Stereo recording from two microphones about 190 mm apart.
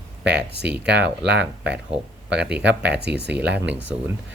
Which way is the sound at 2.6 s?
65° right (ahead or behind).